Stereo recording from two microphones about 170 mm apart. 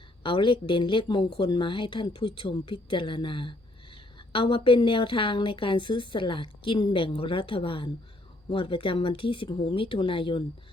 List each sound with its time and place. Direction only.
0.2 s a woman's voice: 30° left (ahead or behind)